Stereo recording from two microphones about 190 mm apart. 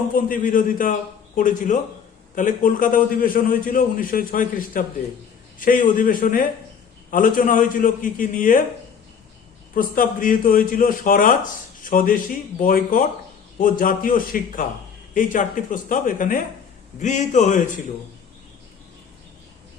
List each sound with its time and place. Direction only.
0.1 s a man's voice: 45° left (ahead or behind)
9.7 s a man's voice: 45° left (ahead or behind)